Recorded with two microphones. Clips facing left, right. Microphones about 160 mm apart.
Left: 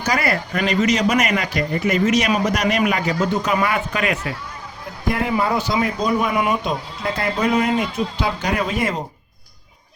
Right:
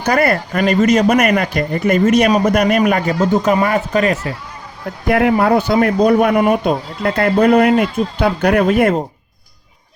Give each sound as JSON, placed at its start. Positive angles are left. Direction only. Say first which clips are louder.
{"t": 0.0, "sound": "speech", "louder": "right 6 dB", "side_deg": -55}
{"t": 5.0, "sound": "speech", "louder": "right 7 dB", "side_deg": -65}